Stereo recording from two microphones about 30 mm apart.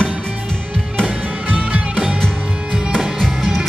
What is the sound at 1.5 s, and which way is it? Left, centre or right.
Music, right.